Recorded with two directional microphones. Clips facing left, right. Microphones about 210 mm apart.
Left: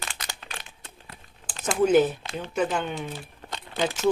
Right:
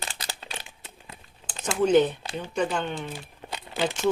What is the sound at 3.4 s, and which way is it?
Crumpling, 10° right (ahead or behind).